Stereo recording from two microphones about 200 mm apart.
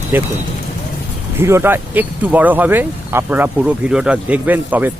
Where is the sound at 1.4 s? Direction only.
10° right (ahead or behind).